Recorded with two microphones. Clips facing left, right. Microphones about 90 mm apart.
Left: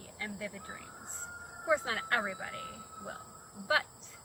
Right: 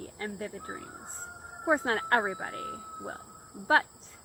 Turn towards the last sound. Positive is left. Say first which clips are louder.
# right 6 dB
turn(degrees=-40)  # may be behind; listen again after turning